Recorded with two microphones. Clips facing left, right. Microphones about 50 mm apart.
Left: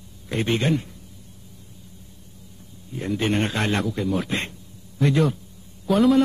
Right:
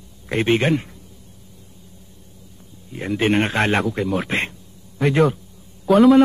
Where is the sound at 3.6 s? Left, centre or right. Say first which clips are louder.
Right 5 dB; right.